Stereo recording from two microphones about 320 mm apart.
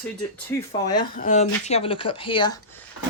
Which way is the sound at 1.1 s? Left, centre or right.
Left.